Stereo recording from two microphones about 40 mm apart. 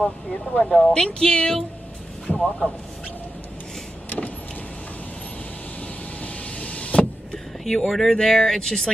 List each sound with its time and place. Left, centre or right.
0.0 s speech: left
2.3 s speech: left
6.2 s power windows: left
7.6 s speech: centre